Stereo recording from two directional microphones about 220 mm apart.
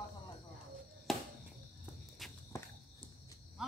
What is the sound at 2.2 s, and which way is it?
Walk, centre (ahead or behind).